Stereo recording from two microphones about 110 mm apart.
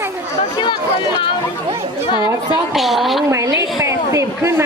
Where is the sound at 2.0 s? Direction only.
45° left (ahead or behind).